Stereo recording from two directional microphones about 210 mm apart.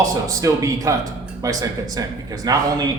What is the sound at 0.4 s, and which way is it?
Speech, 15° right (ahead or behind).